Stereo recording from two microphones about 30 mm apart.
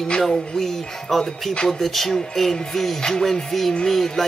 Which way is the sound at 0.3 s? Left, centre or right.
Centre.